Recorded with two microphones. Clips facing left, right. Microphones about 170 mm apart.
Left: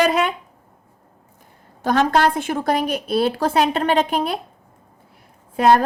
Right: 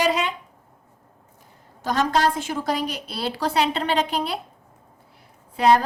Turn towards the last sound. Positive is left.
turn(degrees=50)  # may be behind; listen again after turning